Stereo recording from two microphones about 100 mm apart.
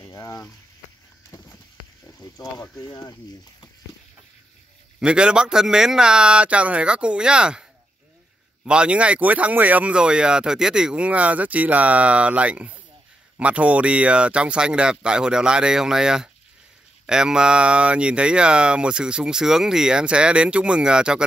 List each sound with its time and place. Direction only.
0.1 s speech: 35° left (ahead or behind)
2.0 s a sound: 35° left (ahead or behind)
2.8 s speech: 40° left (ahead or behind)
5.0 s speech: 10° right (ahead or behind)
8.6 s speech: 10° right (ahead or behind)